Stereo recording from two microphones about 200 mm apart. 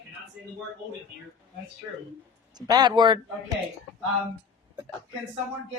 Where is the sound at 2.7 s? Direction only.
20° right (ahead or behind).